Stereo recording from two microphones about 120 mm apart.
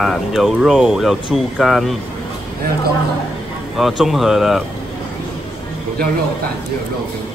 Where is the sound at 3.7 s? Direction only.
Centre (ahead or behind).